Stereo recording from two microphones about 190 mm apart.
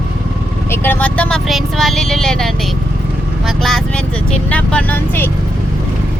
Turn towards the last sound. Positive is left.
turn(degrees=10)  # may be behind; listen again after turning